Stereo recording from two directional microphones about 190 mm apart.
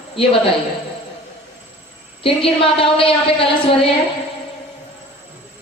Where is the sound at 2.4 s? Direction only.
30° left (ahead or behind).